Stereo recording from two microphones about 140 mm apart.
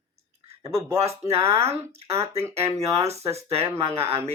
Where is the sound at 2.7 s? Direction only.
20° right (ahead or behind).